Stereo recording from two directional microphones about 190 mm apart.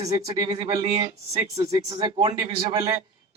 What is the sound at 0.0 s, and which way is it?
Speech, 20° right (ahead or behind).